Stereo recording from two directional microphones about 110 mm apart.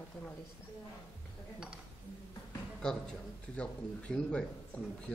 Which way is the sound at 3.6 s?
10° left (ahead or behind).